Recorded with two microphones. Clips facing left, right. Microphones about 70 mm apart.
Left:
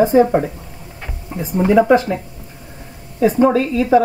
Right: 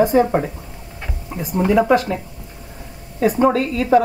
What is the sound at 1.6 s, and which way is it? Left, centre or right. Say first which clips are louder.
Speech: left 3 dB; centre.